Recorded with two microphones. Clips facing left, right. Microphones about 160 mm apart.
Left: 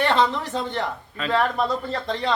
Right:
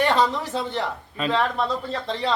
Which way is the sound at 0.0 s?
10° right (ahead or behind).